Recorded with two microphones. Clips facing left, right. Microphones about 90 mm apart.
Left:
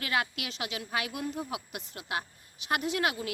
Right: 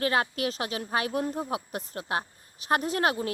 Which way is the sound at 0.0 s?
35° right (ahead or behind).